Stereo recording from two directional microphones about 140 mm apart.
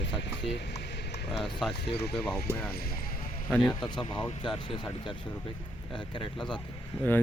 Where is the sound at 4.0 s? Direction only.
35° left (ahead or behind).